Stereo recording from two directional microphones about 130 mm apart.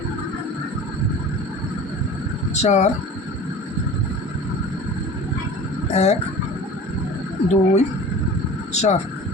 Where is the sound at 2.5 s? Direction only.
60° left (ahead or behind).